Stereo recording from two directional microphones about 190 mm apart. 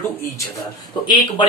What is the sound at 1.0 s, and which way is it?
Speech, 25° left (ahead or behind).